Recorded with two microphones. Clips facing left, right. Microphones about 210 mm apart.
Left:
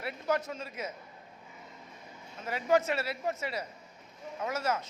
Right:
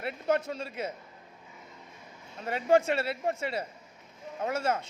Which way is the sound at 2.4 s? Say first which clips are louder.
Right 3 dB; 30° right (ahead or behind).